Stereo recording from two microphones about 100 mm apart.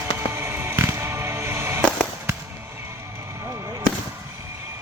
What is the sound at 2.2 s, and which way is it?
Fireworks, 25° right (ahead or behind).